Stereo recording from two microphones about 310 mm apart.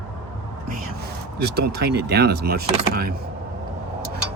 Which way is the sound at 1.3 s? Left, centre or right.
Right.